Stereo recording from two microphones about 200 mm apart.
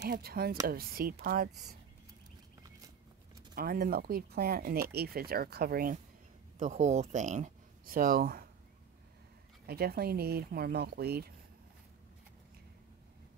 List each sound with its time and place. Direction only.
0.0 s speech: 50° right (ahead or behind)
3.5 s speech: 50° right (ahead or behind)
6.6 s speech: 35° right (ahead or behind)
9.7 s speech: 50° right (ahead or behind)